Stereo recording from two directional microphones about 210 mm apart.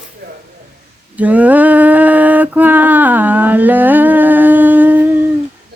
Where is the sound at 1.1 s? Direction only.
5° right (ahead or behind).